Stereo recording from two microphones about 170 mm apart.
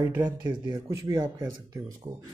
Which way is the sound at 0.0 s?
10° right (ahead or behind).